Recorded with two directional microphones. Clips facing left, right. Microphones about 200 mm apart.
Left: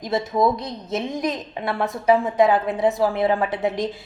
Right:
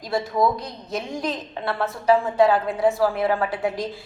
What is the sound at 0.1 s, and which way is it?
A woman's voice, 20° left (ahead or behind).